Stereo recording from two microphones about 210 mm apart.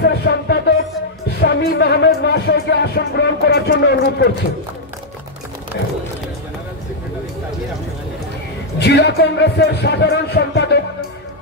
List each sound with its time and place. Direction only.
0.0 s music: 50° left (ahead or behind)
1.4 s speech: 50° left (ahead or behind)
8.7 s speech: 50° left (ahead or behind)